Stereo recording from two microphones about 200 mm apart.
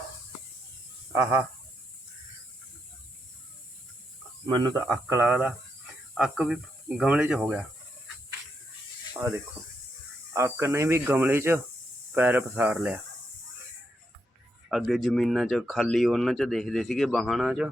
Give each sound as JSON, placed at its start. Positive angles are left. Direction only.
{"t": 4.4, "sound": "speech", "side_deg": -20}
{"t": 9.2, "sound": "speech", "side_deg": -15}
{"t": 10.3, "sound": "speech", "side_deg": -15}
{"t": 14.7, "sound": "speech", "side_deg": 0}